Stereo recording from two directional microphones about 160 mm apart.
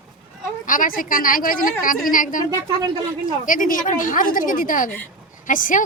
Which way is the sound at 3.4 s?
55° left (ahead or behind).